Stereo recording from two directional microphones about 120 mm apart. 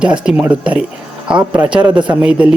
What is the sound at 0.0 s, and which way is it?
A man's voice, 10° right (ahead or behind).